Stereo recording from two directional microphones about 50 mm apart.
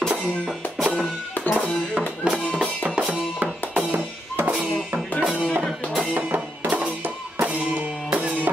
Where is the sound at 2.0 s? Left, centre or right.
Right.